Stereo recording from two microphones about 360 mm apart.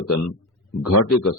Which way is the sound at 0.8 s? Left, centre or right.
Left.